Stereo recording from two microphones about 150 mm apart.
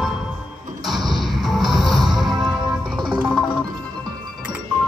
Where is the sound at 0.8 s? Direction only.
Centre (ahead or behind).